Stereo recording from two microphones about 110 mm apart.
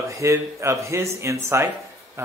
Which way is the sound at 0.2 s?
30° right (ahead or behind).